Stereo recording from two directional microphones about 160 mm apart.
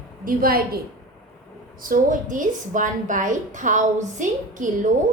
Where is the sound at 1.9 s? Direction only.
55° right (ahead or behind).